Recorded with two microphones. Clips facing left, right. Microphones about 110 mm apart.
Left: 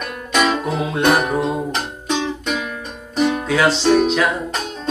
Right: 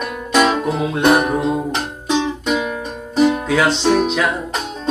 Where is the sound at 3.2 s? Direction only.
5° right (ahead or behind).